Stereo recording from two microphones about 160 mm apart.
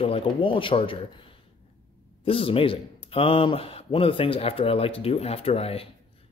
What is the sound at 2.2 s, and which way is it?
Speech, 35° left (ahead or behind).